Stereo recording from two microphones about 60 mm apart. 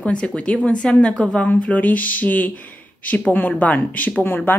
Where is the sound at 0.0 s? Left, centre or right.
Centre.